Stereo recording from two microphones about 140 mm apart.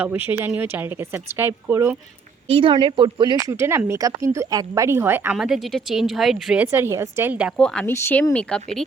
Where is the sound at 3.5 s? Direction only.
20° right (ahead or behind).